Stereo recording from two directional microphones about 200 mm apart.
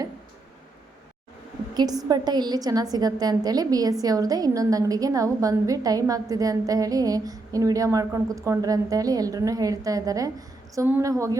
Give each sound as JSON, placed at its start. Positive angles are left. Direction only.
{"t": 1.7, "sound": "a woman's voice", "side_deg": -20}